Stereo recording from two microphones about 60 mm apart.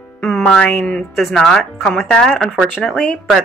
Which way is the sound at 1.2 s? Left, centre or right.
Centre.